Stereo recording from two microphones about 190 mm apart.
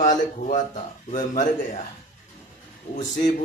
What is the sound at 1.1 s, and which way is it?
Mantra, 45° left (ahead or behind).